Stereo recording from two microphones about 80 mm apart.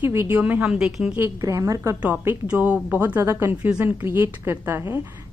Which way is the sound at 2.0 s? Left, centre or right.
Right.